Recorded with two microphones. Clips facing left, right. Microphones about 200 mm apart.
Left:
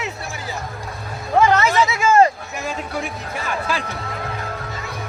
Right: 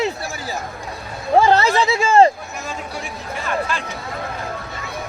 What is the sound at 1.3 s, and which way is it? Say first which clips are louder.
Speech: right 1 dB; 30° right (ahead or behind).